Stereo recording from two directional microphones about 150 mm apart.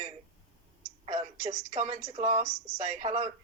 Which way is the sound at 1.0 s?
35° right (ahead or behind).